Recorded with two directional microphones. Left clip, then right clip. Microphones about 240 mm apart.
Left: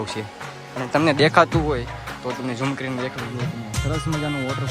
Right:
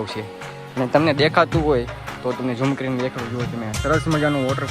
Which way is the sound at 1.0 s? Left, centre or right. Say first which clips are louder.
Left 5 dB; centre.